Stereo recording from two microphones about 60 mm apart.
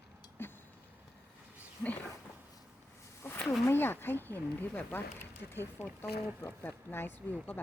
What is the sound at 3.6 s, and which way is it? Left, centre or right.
Speech, left.